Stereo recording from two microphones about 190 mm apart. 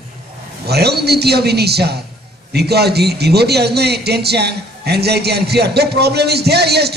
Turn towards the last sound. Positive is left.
turn(degrees=-60)  # may be behind; listen again after turning